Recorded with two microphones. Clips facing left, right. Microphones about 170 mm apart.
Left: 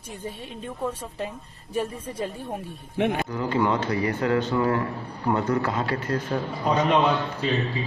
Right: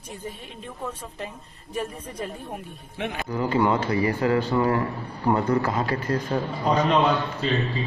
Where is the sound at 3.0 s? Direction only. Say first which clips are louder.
Left 7 dB; 55° left (ahead or behind).